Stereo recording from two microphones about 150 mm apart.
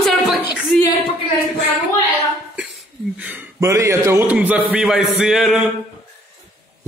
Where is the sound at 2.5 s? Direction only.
5° right (ahead or behind).